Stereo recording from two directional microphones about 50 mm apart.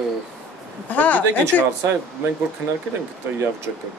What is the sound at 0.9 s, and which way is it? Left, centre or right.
Speech, left.